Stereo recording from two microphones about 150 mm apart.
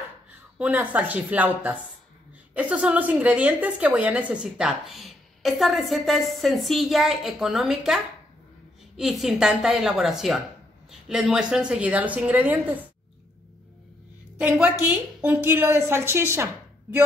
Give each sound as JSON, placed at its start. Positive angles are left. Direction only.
{"t": 0.6, "sound": "a woman's voice", "side_deg": -10}
{"t": 14.5, "sound": "a woman's voice", "side_deg": -10}